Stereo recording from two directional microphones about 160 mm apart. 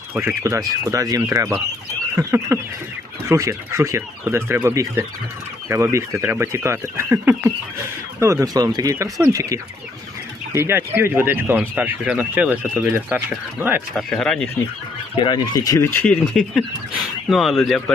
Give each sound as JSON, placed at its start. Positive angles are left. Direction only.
{"t": 0.1, "sound": "speech", "side_deg": -15}
{"t": 13.9, "sound": "speech", "side_deg": 5}
{"t": 15.1, "sound": "speech", "side_deg": 30}
{"t": 16.3, "sound": "speech", "side_deg": 5}